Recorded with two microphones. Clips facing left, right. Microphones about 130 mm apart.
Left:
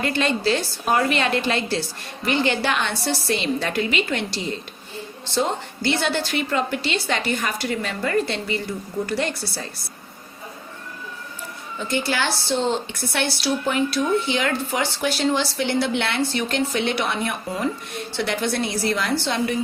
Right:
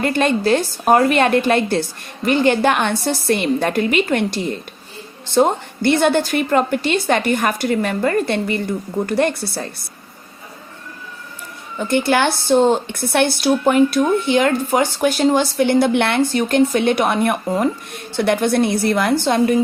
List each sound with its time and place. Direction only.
0.0 s a woman's voice: 50° right (ahead or behind)
11.8 s a woman's voice: 55° right (ahead or behind)